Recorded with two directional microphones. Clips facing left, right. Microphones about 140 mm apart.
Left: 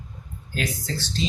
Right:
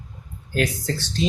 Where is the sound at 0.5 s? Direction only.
55° right (ahead or behind).